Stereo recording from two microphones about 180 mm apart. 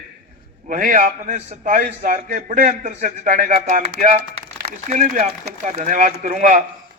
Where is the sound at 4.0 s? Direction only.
45° right (ahead or behind).